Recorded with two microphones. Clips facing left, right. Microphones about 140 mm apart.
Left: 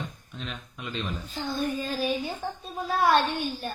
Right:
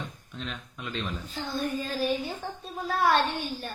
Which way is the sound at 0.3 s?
5° left (ahead or behind).